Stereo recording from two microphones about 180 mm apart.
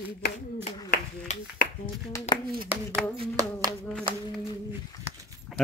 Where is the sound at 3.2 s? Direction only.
20° right (ahead or behind).